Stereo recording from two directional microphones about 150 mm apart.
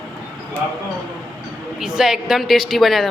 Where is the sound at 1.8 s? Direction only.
5° right (ahead or behind).